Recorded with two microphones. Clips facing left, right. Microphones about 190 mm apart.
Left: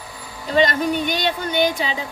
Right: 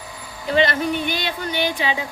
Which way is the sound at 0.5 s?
40° left (ahead or behind).